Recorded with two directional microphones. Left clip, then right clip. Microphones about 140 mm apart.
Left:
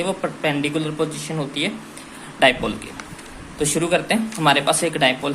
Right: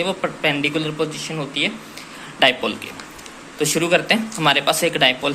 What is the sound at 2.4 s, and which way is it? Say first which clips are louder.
Speech: even; 5° left (ahead or behind).